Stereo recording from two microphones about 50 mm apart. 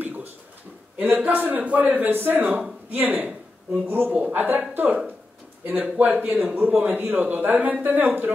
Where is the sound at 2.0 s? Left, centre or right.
Right.